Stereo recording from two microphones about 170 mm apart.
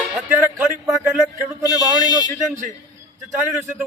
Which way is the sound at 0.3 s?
10° right (ahead or behind).